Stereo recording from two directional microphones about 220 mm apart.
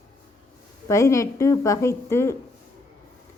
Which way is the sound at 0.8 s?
15° left (ahead or behind).